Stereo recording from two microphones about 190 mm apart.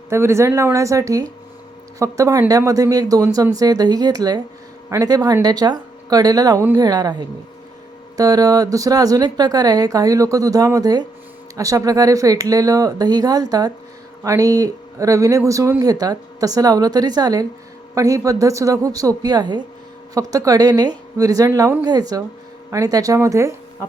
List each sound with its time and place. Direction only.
0.1 s a woman's voice: 15° right (ahead or behind)